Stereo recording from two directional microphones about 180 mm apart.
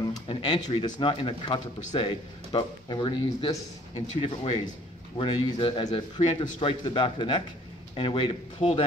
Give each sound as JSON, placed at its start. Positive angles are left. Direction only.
{"t": 0.3, "sound": "music", "side_deg": 30}
{"t": 0.7, "sound": "speech", "side_deg": 25}